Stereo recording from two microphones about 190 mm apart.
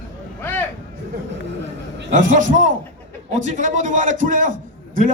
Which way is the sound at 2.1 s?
40° right (ahead or behind).